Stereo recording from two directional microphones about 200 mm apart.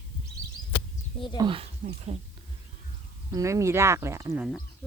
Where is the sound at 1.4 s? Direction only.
25° right (ahead or behind).